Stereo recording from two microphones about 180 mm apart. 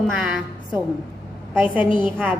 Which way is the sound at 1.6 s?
10° right (ahead or behind).